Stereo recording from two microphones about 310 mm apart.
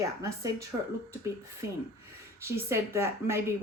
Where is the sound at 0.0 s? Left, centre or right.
Centre.